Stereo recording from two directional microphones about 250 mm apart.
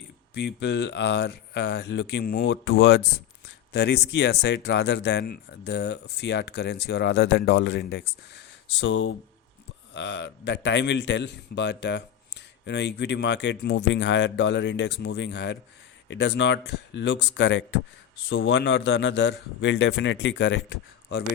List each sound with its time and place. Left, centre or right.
0.3 s a man's voice: left